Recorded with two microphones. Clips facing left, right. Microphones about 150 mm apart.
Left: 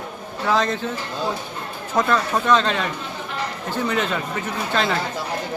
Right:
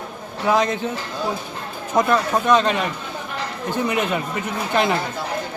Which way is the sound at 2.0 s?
15° right (ahead or behind).